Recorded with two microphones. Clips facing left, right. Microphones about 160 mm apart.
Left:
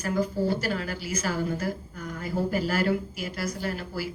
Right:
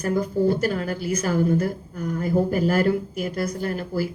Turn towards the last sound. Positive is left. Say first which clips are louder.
# right 6 dB
turn(degrees=-50)  # may be behind; listen again after turning